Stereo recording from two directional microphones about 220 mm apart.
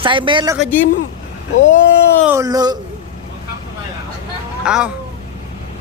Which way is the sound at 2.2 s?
10° right (ahead or behind).